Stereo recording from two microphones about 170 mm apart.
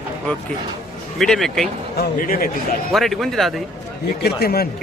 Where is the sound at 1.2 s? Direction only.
Centre (ahead or behind).